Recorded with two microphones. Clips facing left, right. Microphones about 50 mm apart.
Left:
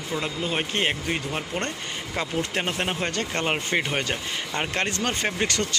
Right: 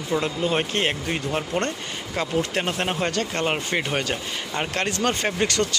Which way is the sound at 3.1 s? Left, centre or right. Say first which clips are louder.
Right 2 dB; left.